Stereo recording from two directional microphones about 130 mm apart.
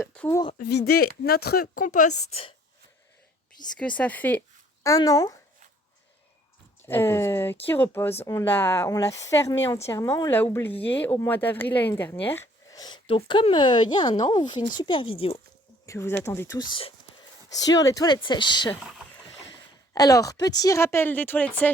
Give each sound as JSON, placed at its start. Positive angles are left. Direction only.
{"t": 1.7, "sound": "speech", "side_deg": 90}
{"t": 3.8, "sound": "speech", "side_deg": 10}
{"t": 4.8, "sound": "speech", "side_deg": 25}
{"t": 6.8, "sound": "speech", "side_deg": 15}
{"t": 12.7, "sound": "speech", "side_deg": 35}
{"t": 15.9, "sound": "speech", "side_deg": 20}
{"t": 16.6, "sound": "speech", "side_deg": 40}
{"t": 17.5, "sound": "speech", "side_deg": 30}
{"t": 19.9, "sound": "speech", "side_deg": 30}